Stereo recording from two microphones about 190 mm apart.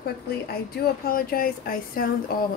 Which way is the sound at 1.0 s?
50° left (ahead or behind).